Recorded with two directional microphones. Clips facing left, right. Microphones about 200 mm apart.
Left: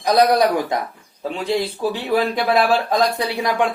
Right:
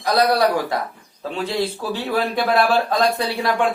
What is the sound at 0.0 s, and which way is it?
Speech, 20° left (ahead or behind).